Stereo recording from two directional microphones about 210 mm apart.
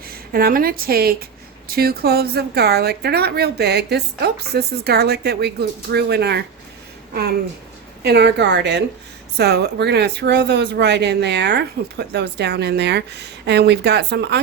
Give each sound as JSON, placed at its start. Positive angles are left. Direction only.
{"t": 0.1, "sound": "a woman's voice", "side_deg": -45}